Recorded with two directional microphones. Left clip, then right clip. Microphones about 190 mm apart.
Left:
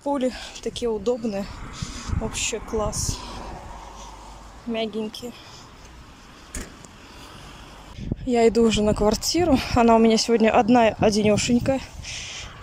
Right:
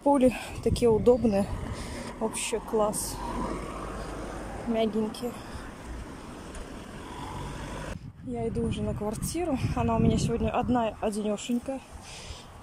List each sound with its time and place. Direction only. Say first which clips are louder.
0.0 s speech: right 2 dB; 5° right (ahead or behind)
2.9 s speech: left 4 dB; 25° right (ahead or behind)
4.7 s a woman's voice: left 1 dB; 5° right (ahead or behind)
8.3 s speech: left 14 dB; 35° left (ahead or behind)